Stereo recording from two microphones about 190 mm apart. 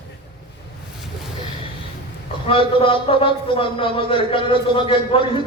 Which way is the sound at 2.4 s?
30° left (ahead or behind).